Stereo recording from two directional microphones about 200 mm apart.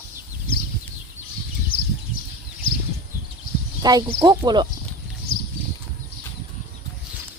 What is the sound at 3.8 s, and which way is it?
Speech, 20° right (ahead or behind).